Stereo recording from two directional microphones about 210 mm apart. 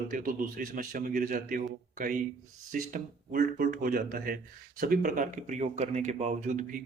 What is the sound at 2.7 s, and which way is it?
Speech, 40° right (ahead or behind).